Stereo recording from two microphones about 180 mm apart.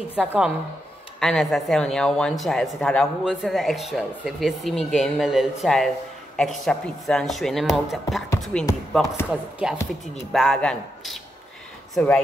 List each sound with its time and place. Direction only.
0.2 s a woman's voice: 5° right (ahead or behind)